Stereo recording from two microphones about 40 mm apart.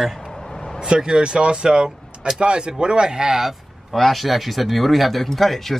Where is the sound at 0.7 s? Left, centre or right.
Right.